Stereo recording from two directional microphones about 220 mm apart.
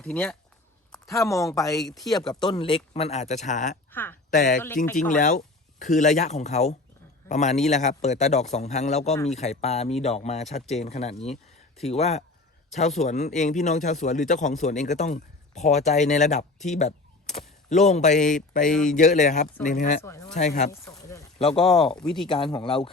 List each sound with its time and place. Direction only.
0.0 s speech: 5° left (ahead or behind)
1.8 s speech: centre (ahead or behind)
2.0 s speech: 15° left (ahead or behind); by 3.8 s 35° left (ahead or behind)
3.9 s speech: 10° left (ahead or behind)
4.3 s speech: 35° left (ahead or behind)
18.7 s speech: 5° left (ahead or behind)
18.9 s speech: 35° left (ahead or behind)
20.1 s speech: 15° left (ahead or behind)
20.3 s speech: 35° left (ahead or behind)
20.7 s speech: 15° left (ahead or behind)
21.3 s speech: 25° left (ahead or behind)
21.9 s speech: centre (ahead or behind)
22.3 s speech: 20° left (ahead or behind)